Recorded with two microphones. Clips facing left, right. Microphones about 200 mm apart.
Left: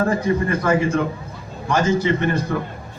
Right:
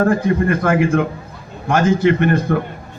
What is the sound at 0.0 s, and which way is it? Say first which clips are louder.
A man's voice: right 4 dB; 55° right (ahead or behind).